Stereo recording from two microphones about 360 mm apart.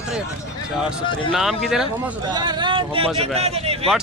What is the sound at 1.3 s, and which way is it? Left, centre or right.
Speech, centre.